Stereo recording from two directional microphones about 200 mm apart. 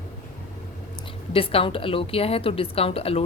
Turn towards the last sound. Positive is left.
turn(degrees=30)  # may be behind; listen again after turning